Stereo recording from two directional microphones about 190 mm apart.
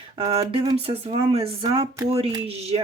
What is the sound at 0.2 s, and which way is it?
Speech, 25° right (ahead or behind).